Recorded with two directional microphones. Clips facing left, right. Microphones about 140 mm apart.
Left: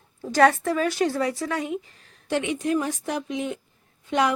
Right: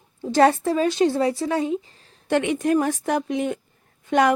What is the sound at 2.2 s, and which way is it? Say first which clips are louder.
A woman's voice: right 4 dB; 55° right (ahead or behind).